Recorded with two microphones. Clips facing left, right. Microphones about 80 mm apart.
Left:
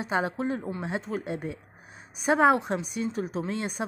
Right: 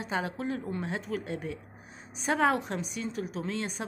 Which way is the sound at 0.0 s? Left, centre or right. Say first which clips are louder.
Left 5 dB; left.